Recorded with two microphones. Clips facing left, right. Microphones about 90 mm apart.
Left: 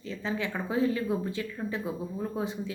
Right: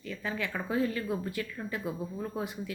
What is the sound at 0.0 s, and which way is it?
Speech, 25° left (ahead or behind).